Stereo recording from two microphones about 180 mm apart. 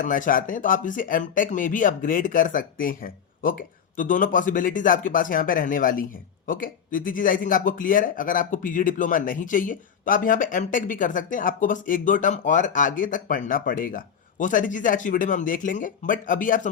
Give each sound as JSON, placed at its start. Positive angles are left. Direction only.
{"t": 0.0, "sound": "speech", "side_deg": 50}